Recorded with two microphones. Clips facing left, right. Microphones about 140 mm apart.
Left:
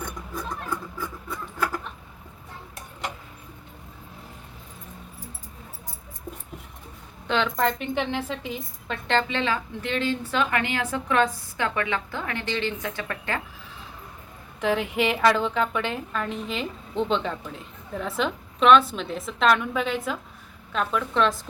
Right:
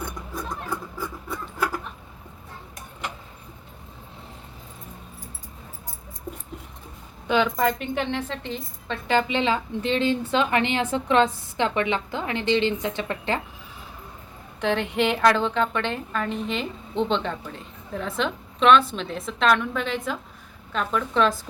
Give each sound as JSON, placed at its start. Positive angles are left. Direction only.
{"t": 7.3, "sound": "a woman's voice", "side_deg": -5}
{"t": 9.0, "sound": "a woman's voice", "side_deg": -15}
{"t": 14.6, "sound": "a woman's voice", "side_deg": 0}